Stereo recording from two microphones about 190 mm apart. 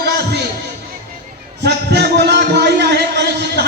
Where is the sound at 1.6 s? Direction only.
60° right (ahead or behind).